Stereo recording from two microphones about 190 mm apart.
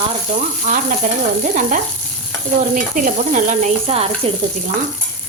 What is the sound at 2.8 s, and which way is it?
Frying, 40° right (ahead or behind).